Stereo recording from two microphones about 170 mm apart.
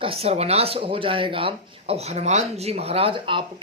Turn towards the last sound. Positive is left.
turn(degrees=-30)  # may be behind; listen again after turning